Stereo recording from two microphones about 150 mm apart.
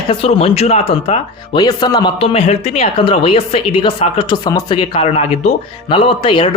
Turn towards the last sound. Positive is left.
turn(degrees=35)  # may be behind; listen again after turning